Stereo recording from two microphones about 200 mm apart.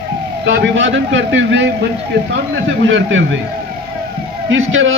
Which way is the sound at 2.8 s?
70° right (ahead or behind).